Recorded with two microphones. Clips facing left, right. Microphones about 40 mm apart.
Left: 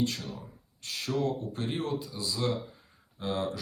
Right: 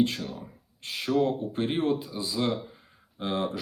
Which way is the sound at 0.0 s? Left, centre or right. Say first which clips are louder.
Right 5 dB; right.